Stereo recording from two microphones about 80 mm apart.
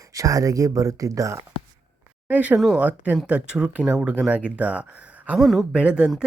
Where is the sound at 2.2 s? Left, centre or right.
Centre.